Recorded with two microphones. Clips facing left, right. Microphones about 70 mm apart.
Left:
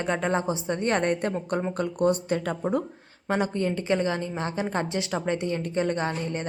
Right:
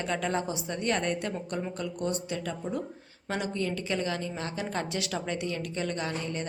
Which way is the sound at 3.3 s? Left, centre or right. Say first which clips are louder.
Left 6 dB; left.